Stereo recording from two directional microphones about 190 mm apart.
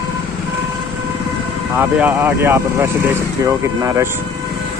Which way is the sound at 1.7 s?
10° right (ahead or behind).